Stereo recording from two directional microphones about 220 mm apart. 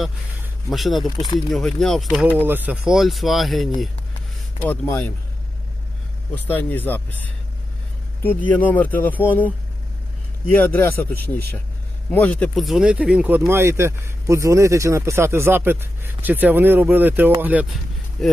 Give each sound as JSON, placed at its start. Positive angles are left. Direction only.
{"t": 0.7, "sound": "speech", "side_deg": 0}
{"t": 1.1, "sound": "speech", "side_deg": 20}
{"t": 1.5, "sound": "speech", "side_deg": 0}
{"t": 2.5, "sound": "speech", "side_deg": -10}
{"t": 6.5, "sound": "speech", "side_deg": 5}
{"t": 9.2, "sound": "speech", "side_deg": -5}
{"t": 10.5, "sound": "speech", "side_deg": 10}